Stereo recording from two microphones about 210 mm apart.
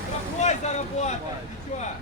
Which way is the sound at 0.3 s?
35° left (ahead or behind).